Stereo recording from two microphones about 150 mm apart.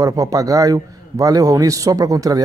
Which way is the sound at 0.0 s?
25° right (ahead or behind).